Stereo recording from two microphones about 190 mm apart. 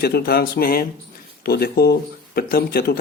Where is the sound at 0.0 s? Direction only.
55° left (ahead or behind).